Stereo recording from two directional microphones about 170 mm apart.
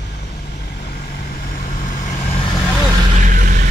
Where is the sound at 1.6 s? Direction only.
50° left (ahead or behind).